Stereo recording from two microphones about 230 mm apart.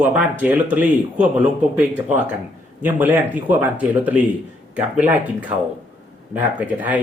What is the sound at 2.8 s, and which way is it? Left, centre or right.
Speech, centre.